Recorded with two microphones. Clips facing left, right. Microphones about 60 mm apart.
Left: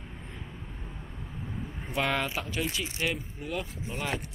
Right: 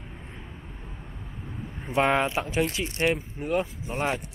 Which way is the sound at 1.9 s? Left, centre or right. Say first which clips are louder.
Right 6 dB; right.